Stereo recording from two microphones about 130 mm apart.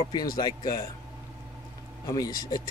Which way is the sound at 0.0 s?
30° left (ahead or behind).